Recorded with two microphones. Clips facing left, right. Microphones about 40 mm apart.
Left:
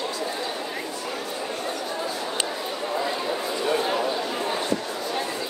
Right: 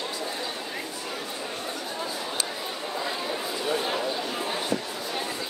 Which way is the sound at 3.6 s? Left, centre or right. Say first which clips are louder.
Left 4 dB; centre.